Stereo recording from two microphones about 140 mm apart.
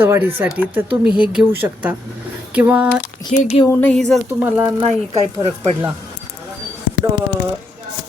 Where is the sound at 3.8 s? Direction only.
5° left (ahead or behind).